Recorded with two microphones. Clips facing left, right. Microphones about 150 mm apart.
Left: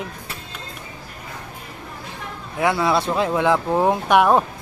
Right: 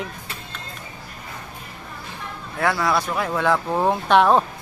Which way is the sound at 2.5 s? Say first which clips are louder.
Left 2 dB; 20° left (ahead or behind).